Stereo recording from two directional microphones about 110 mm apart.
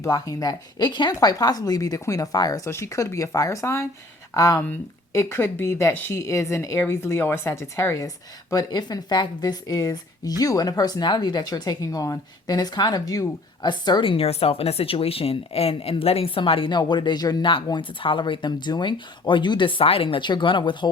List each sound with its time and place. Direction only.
0.0 s a woman's voice: 30° left (ahead or behind)